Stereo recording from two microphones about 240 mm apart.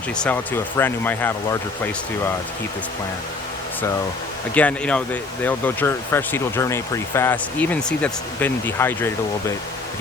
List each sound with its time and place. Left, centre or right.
0.2 s speech: centre
4.5 s speech: centre